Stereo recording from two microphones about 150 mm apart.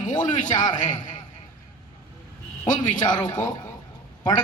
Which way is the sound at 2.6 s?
60° left (ahead or behind).